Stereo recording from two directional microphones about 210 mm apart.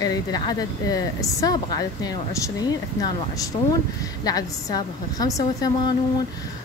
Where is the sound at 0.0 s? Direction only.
15° left (ahead or behind).